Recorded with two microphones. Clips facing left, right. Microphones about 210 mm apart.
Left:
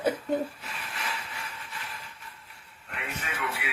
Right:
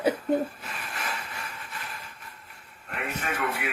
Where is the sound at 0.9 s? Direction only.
50° right (ahead or behind).